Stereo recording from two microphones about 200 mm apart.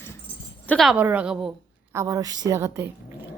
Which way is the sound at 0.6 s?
Centre (ahead or behind).